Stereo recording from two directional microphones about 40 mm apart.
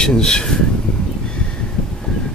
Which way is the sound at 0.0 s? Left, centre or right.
Centre.